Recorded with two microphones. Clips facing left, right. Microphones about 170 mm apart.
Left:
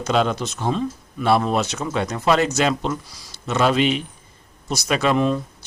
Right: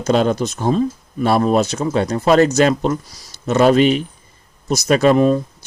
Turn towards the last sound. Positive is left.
turn(degrees=-40)  # may be behind; listen again after turning